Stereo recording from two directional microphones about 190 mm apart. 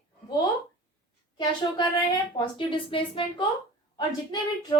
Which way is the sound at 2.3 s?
25° left (ahead or behind).